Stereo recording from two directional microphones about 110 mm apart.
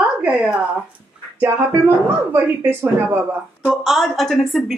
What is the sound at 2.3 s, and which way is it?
Speech, 20° right (ahead or behind).